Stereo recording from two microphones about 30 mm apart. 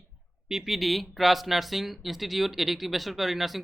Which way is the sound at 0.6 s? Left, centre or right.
Centre.